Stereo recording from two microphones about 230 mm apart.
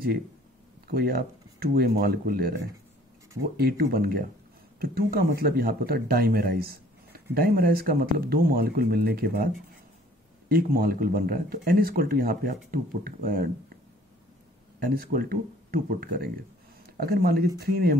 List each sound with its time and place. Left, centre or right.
0.8 s speech: right
10.5 s speech: right
14.8 s speech: right